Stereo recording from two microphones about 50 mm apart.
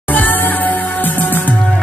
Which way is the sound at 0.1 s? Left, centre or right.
Left.